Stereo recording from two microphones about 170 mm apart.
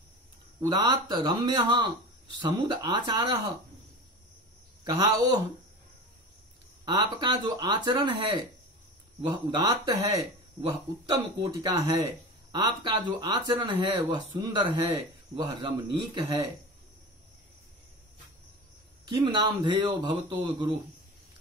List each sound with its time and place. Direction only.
0.6 s a man's voice: 25° right (ahead or behind)
6.8 s a man's voice: 25° right (ahead or behind)
19.0 s a man's voice: 25° right (ahead or behind)